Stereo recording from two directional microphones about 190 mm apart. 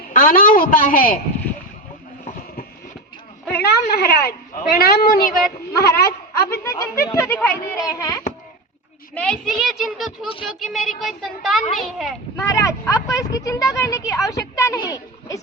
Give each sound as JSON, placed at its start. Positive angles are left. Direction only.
{"t": 0.1, "sound": "a woman's voice", "side_deg": 45}
{"t": 3.5, "sound": "a woman's voice", "side_deg": 60}
{"t": 6.7, "sound": "a child's voice", "side_deg": 15}
{"t": 9.1, "sound": "speech", "side_deg": 0}
{"t": 12.4, "sound": "speech", "side_deg": 15}